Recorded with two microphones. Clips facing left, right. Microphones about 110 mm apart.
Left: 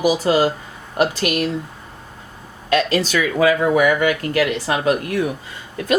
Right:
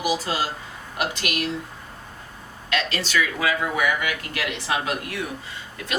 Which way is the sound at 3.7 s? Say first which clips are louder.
Left 9 dB; 60° left (ahead or behind).